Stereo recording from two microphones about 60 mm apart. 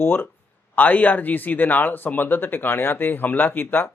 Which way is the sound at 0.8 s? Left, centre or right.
Left.